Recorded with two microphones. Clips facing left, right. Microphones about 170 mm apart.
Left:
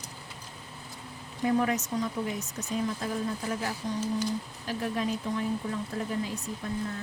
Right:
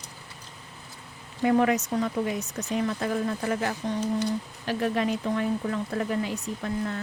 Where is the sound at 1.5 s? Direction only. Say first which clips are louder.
Right 4 dB; 75° right (ahead or behind).